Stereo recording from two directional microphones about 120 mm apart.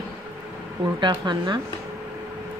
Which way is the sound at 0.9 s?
40° right (ahead or behind).